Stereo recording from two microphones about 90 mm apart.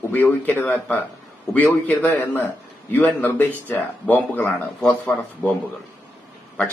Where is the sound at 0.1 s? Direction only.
20° left (ahead or behind).